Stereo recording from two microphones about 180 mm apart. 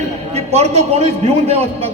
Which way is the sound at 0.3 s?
35° right (ahead or behind).